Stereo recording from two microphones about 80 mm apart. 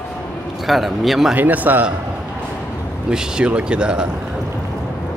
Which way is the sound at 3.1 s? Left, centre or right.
Centre.